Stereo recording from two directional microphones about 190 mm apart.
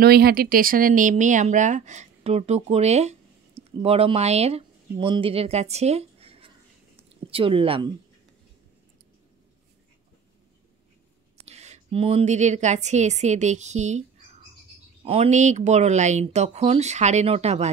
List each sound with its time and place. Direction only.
0.0 s a woman's voice: 55° right (ahead or behind); by 7.9 s 30° right (ahead or behind)
11.4 s speech: 35° right (ahead or behind)
15.0 s speech: 35° right (ahead or behind)